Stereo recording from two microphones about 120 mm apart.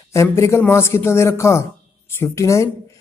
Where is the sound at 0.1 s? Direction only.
25° left (ahead or behind).